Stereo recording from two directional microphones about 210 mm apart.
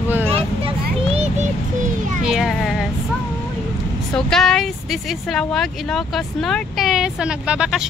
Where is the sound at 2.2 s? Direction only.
5° right (ahead or behind).